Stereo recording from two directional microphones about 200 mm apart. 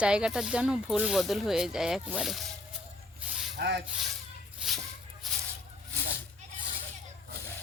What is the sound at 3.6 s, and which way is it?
Rub, 55° right (ahead or behind).